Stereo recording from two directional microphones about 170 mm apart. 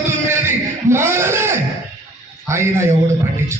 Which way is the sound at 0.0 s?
15° right (ahead or behind).